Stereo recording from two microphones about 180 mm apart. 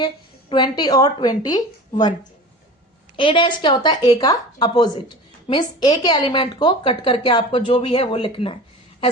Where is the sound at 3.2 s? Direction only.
25° left (ahead or behind).